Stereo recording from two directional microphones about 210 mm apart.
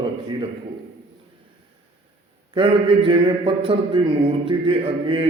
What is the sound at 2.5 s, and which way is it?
A man's voice, 25° right (ahead or behind).